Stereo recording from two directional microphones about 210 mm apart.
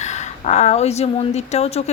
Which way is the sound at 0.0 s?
35° left (ahead or behind).